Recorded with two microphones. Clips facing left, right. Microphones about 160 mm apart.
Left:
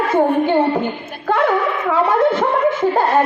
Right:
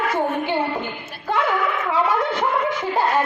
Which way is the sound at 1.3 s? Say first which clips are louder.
Left 5 dB; 50° left (ahead or behind).